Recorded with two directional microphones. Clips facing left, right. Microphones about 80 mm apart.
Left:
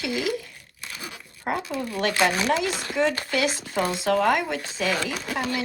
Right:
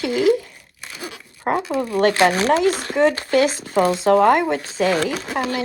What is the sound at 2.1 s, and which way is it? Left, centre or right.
Speech, right.